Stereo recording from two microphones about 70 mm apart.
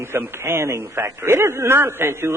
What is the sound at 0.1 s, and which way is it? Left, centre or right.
A man's voice, right.